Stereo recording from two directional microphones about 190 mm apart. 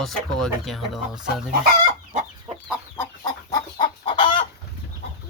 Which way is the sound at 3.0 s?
20° left (ahead or behind).